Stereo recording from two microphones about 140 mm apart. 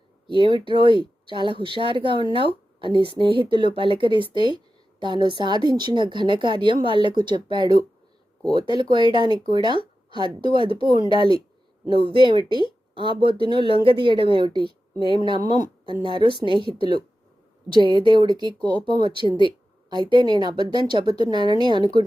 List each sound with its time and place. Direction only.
0.5 s speech: 35° right (ahead or behind)